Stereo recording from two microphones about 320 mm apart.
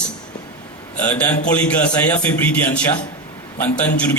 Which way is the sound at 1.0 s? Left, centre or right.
Centre.